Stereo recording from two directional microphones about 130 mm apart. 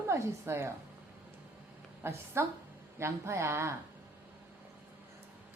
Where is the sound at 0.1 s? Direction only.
20° right (ahead or behind).